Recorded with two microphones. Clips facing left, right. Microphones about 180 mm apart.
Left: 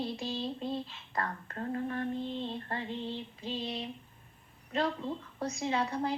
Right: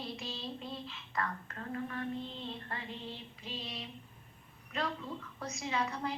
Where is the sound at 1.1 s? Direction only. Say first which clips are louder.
Left 2 dB; 35° left (ahead or behind).